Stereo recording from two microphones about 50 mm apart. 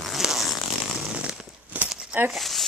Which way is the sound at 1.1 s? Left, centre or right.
Right.